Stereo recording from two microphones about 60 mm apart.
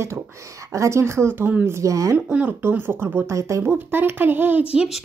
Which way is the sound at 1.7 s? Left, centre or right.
Right.